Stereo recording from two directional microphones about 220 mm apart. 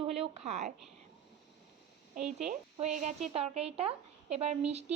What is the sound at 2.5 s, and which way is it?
A woman's voice, 35° right (ahead or behind).